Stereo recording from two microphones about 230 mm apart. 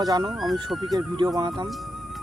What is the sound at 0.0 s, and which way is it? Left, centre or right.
Speech, centre.